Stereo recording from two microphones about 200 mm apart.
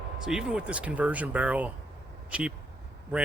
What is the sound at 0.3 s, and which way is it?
Speech, centre (ahead or behind).